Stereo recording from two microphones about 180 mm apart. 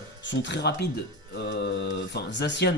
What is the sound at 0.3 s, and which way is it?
Speech, 75° left (ahead or behind).